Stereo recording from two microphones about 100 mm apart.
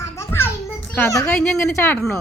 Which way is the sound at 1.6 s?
25° left (ahead or behind).